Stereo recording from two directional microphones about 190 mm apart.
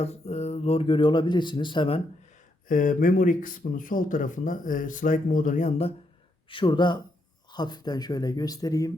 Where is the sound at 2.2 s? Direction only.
40° left (ahead or behind).